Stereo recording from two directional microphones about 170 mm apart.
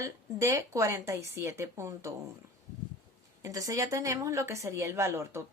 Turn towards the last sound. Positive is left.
turn(degrees=-15)  # may be behind; listen again after turning